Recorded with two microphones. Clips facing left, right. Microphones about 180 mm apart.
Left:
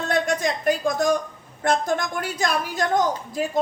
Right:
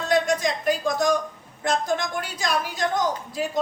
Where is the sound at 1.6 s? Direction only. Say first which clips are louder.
Left 2 dB; 55° left (ahead or behind).